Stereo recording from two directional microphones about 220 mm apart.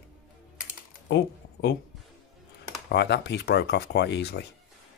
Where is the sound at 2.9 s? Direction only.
50° left (ahead or behind).